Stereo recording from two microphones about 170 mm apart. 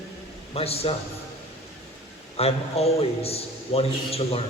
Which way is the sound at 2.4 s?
35° left (ahead or behind).